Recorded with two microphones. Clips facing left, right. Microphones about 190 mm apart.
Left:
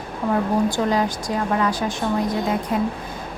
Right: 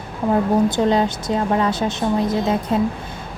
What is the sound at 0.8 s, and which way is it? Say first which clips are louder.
A woman's voice: right 3 dB; 25° right (ahead or behind).